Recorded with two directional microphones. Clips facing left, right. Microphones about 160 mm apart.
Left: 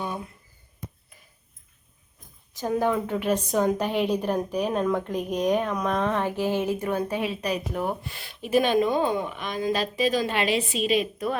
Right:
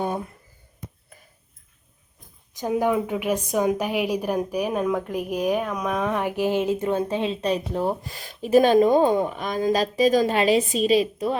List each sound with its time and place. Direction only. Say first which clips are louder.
2.6 s a woman's voice: right 2 dB; 15° right (ahead or behind)